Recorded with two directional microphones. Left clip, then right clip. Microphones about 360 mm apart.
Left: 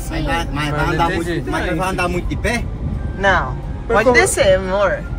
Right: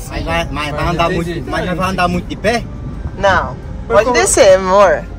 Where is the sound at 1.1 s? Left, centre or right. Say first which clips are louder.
Right 2 dB; centre.